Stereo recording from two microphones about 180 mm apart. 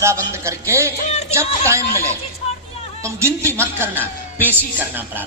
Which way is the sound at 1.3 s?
15° right (ahead or behind).